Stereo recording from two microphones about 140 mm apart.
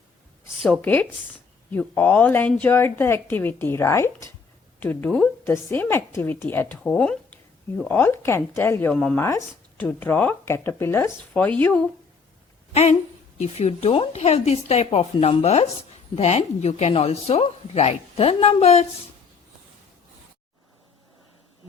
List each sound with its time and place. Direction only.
0.6 s speech: 10° left (ahead or behind)
12.7 s a woman's voice: 55° left (ahead or behind)